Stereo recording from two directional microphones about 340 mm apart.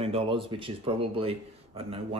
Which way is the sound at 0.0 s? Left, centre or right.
Centre.